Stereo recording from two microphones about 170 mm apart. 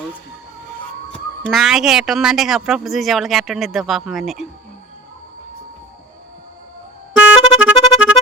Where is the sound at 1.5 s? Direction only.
Centre (ahead or behind).